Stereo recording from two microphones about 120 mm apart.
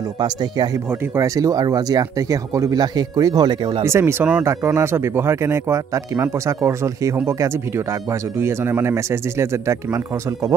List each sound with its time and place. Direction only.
0.2 s speech: 35° right (ahead or behind)
0.8 s speech: 25° right (ahead or behind)
3.8 s speech: 20° right (ahead or behind)